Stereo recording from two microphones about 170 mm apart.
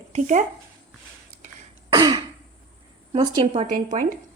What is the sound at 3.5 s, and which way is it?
Speech, 45° right (ahead or behind).